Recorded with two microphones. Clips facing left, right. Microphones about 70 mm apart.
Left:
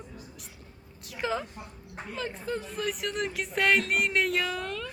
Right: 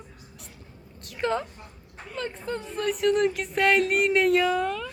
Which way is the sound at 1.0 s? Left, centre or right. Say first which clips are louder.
Right 4 dB; centre.